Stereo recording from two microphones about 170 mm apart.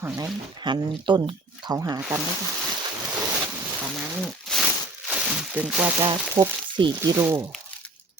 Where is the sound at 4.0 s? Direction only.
Centre (ahead or behind).